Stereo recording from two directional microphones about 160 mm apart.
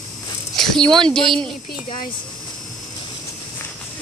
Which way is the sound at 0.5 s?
Centre (ahead or behind).